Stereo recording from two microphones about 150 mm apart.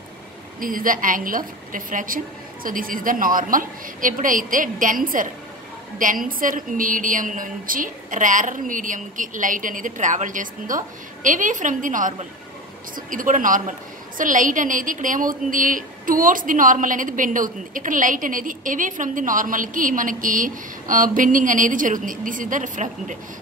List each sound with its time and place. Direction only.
0.6 s a woman's voice: 65° right (ahead or behind)